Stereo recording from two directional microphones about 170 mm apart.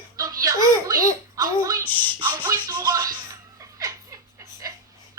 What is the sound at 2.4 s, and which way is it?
Music, 20° right (ahead or behind).